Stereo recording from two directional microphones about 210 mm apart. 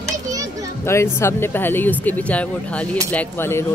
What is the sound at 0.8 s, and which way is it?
Speech, 10° left (ahead or behind).